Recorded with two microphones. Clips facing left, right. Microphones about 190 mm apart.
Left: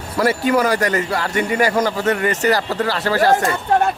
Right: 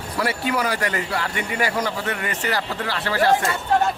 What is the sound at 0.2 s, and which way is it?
A man's voice, 45° left (ahead or behind).